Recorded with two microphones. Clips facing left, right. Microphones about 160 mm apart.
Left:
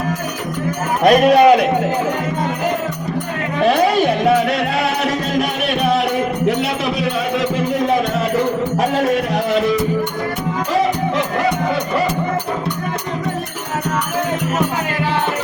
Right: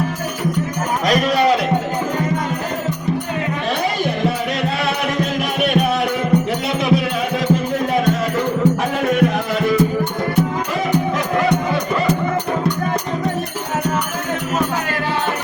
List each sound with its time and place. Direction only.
1.0 s a man's voice: 55° left (ahead or behind)